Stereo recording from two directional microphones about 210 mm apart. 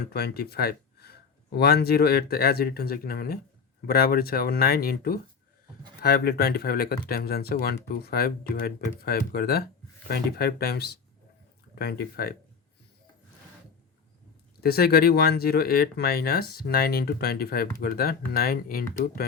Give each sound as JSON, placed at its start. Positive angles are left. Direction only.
{"t": 0.1, "sound": "speech", "side_deg": 50}
{"t": 14.6, "sound": "speech", "side_deg": 45}